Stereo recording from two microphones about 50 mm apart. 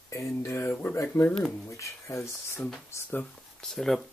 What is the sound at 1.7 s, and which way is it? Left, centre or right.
Speech, left.